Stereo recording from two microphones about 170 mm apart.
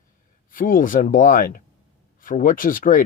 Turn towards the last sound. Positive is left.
turn(degrees=50)  # may be behind; listen again after turning